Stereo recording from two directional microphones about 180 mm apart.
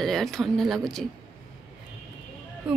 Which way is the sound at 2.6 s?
5° right (ahead or behind).